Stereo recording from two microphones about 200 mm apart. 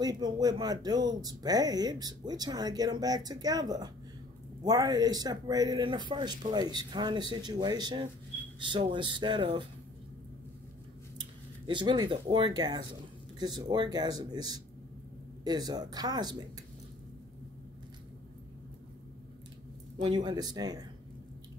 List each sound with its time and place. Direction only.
0.0 s speech: 20° right (ahead or behind)
11.1 s speech: 25° right (ahead or behind)
20.0 s speech: 25° right (ahead or behind)